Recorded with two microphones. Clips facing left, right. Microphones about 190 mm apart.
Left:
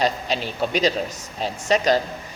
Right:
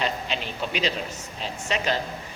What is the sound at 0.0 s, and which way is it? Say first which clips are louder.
A man's voice: left 5 dB; 40° left (ahead or behind).